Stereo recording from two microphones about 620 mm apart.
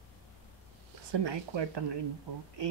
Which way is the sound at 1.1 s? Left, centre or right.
Right.